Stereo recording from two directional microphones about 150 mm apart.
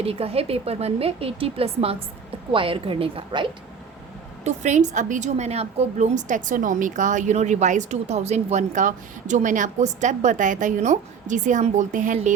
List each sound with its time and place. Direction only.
0.0 s a woman's voice: 40° right (ahead or behind)
4.4 s a woman's voice: 50° right (ahead or behind)